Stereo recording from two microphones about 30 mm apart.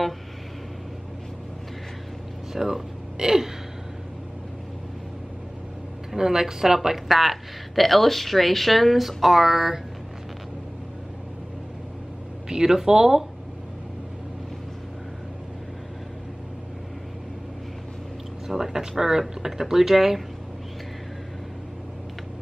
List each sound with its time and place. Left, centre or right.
2.5 s speech: centre
6.1 s speech: centre
7.1 s speech: centre
12.4 s a man's voice: right
18.5 s speech: centre